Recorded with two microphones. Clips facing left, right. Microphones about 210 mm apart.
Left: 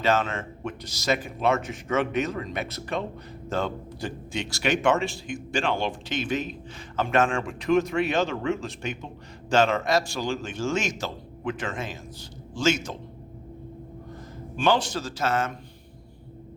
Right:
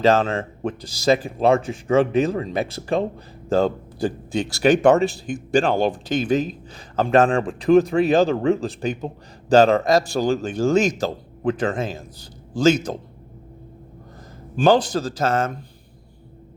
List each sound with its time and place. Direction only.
0.0 s a man's voice: 35° right (ahead or behind)
14.5 s a man's voice: 40° right (ahead or behind)